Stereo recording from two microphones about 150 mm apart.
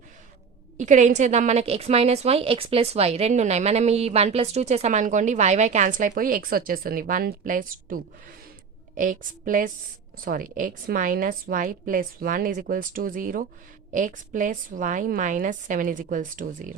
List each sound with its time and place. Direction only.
0.8 s a woman's voice: 55° right (ahead or behind)